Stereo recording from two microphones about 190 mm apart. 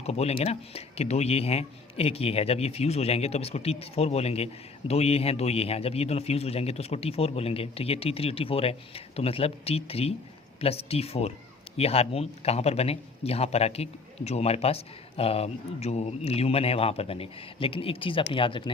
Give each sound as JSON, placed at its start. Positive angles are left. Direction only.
{"t": 0.0, "sound": "speech", "side_deg": 35}